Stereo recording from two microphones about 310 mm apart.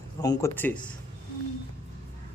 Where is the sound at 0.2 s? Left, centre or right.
Centre.